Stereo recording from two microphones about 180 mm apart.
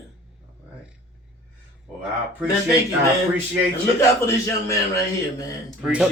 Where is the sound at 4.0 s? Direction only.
15° left (ahead or behind).